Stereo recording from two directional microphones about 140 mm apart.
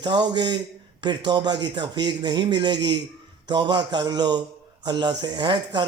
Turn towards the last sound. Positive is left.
turn(degrees=-30)  # may be behind; listen again after turning